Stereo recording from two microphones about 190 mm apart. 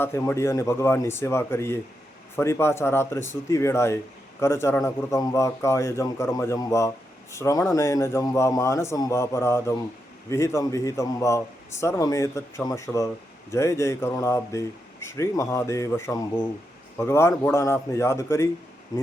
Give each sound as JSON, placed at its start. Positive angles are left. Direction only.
{"t": 0.0, "sound": "a man's voice", "side_deg": 15}